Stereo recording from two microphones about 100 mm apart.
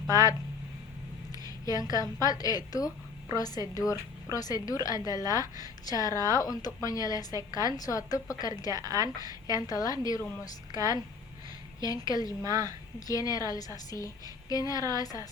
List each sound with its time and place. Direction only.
1.3 s a woman's voice: 35° left (ahead or behind)
8.7 s a woman's voice: 40° right (ahead or behind)
9.6 s a woman's voice: 35° left (ahead or behind)
12.4 s a woman's voice: 40° right (ahead or behind)
13.1 s a woman's voice: 35° left (ahead or behind)